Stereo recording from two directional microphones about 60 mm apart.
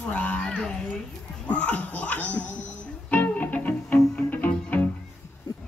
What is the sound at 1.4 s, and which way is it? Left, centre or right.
Music, left.